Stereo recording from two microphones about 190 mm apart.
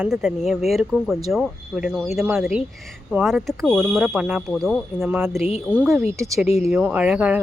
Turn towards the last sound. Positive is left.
turn(degrees=-5)  # may be behind; listen again after turning